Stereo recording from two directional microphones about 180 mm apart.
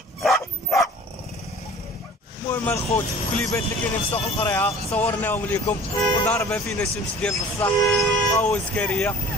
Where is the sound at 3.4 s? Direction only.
15° left (ahead or behind).